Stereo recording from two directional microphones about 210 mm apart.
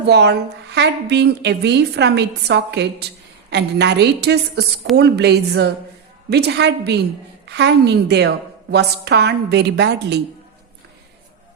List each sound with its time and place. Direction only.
0.1 s a woman's voice: 55° right (ahead or behind)